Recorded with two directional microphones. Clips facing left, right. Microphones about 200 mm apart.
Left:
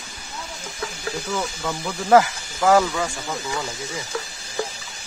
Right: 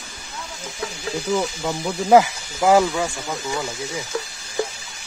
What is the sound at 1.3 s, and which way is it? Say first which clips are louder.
Speech: right 6 dB; 20° right (ahead or behind).